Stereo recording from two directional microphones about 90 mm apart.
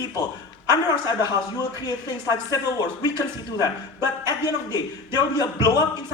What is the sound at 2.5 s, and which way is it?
Speech, 45° left (ahead or behind).